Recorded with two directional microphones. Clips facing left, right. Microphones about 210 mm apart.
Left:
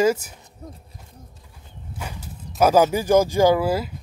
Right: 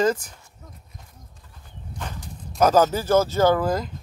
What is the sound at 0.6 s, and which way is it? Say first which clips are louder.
Hoot: left 10 dB; 35° left (ahead or behind).